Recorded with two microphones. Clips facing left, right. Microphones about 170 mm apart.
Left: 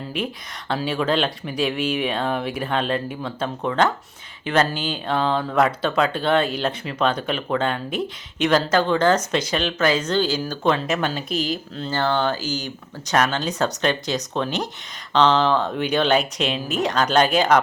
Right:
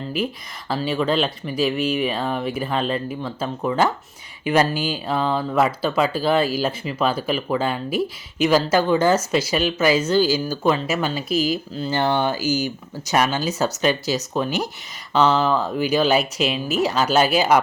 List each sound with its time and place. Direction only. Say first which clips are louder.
0.2 s speech: right 1 dB; centre (ahead or behind)